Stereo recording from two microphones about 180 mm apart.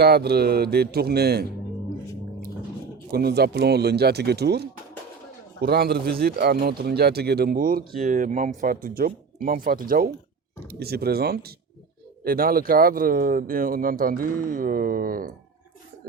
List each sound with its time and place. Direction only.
0.0 s speech: 65° right (ahead or behind)
3.1 s speech: 60° right (ahead or behind)